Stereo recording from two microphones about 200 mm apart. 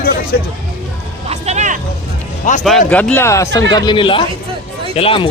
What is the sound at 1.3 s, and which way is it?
Music, 35° right (ahead or behind).